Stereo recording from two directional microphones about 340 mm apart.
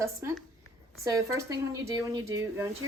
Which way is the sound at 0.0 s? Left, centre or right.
Centre.